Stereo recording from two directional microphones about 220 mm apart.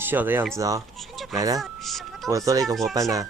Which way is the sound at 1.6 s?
Centre (ahead or behind).